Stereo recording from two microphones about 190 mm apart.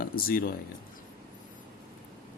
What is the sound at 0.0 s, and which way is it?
Speech, 50° left (ahead or behind).